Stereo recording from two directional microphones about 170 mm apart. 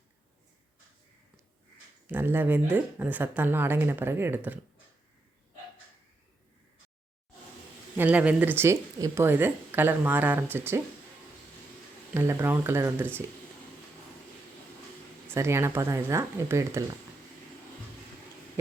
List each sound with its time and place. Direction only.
2.0 s speech: 10° right (ahead or behind)
7.9 s speech: 10° right (ahead or behind)
12.1 s speech: 15° right (ahead or behind)
15.3 s speech: 15° right (ahead or behind)